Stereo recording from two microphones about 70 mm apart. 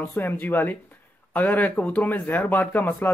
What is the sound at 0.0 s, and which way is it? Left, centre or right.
Speech, left.